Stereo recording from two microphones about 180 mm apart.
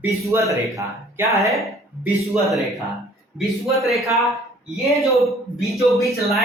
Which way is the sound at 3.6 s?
Centre (ahead or behind).